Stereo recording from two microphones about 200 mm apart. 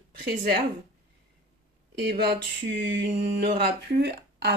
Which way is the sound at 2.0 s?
50° right (ahead or behind).